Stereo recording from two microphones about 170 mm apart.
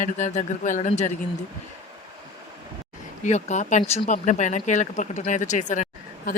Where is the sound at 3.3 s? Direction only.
45° left (ahead or behind).